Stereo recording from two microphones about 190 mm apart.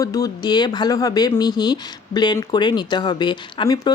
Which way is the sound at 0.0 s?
20° left (ahead or behind).